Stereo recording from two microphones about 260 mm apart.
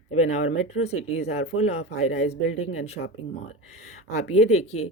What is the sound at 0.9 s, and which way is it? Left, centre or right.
Speech, left.